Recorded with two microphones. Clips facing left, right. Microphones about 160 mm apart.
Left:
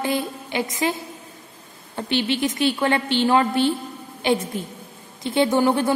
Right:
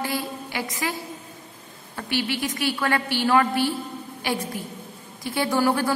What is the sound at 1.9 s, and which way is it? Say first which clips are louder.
A woman's voice: left 4 dB; 25° left (ahead or behind).